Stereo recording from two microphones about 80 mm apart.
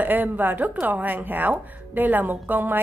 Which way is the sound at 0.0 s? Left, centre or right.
Right.